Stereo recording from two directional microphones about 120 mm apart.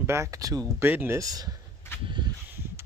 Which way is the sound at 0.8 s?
20° right (ahead or behind).